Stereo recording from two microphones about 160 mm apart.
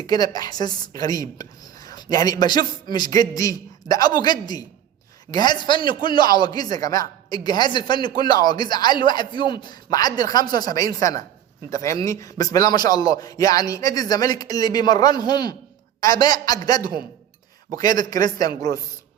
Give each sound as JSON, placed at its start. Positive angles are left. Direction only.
{"t": 0.1, "sound": "a woman's voice", "side_deg": 25}